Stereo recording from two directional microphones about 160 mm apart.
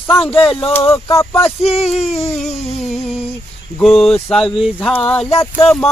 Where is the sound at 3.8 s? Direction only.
Centre (ahead or behind).